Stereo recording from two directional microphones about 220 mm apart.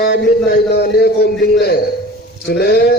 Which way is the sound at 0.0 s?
45° left (ahead or behind).